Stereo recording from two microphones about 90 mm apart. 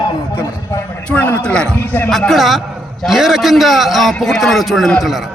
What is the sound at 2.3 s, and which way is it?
A man's voice, centre (ahead or behind).